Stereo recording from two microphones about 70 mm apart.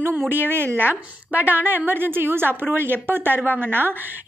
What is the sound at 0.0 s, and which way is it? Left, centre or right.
A woman's voice, right.